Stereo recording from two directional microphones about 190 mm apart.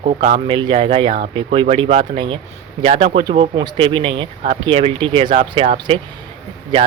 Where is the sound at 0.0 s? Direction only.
35° right (ahead or behind).